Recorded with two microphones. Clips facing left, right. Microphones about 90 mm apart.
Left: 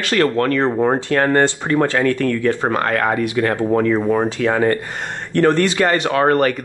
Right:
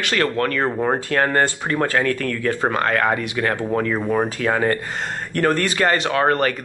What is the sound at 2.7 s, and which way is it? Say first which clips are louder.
Speech: left 1 dB; 25° left (ahead or behind).